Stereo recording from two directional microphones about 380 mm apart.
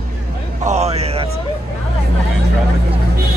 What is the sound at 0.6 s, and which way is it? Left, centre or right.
Speech, centre.